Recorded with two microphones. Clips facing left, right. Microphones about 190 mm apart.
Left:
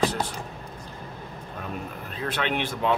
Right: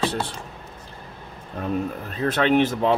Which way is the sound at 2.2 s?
45° right (ahead or behind).